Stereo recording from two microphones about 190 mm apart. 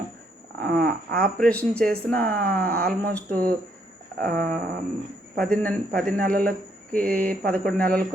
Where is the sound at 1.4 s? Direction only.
5° left (ahead or behind).